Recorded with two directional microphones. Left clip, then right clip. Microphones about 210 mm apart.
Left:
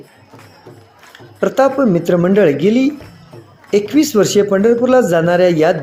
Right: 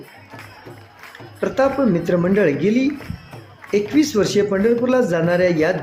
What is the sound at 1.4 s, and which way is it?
Speech, 20° left (ahead or behind).